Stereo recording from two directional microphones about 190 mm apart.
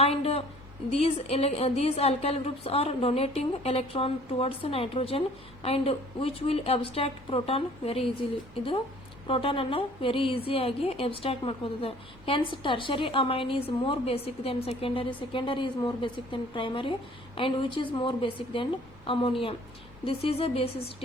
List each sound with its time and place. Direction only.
0.0 s a sound: 30° left (ahead or behind)
0.9 s a woman's voice: 35° left (ahead or behind)
9.2 s a woman's voice: 30° left (ahead or behind)